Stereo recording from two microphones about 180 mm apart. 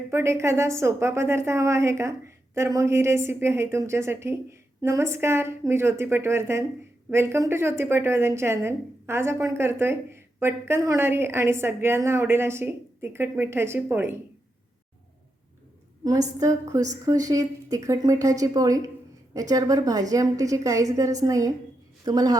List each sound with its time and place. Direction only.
0.1 s a woman's voice: 15° right (ahead or behind)
16.0 s a woman's voice: 20° right (ahead or behind)